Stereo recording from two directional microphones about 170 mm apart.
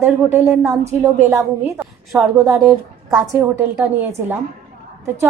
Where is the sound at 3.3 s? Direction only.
15° right (ahead or behind).